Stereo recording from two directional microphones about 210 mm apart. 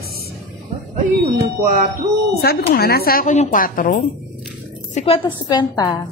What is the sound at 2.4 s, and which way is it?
Speech, 45° left (ahead or behind).